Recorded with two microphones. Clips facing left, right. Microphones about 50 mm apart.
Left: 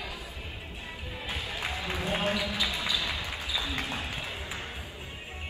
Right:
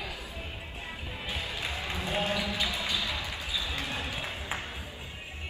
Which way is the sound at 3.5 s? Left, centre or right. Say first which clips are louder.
Left 1 dB; left.